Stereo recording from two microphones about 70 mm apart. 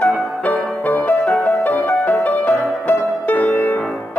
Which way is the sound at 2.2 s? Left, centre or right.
Left.